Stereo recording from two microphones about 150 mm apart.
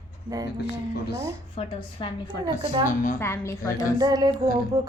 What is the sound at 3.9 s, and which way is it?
Music, 25° right (ahead or behind).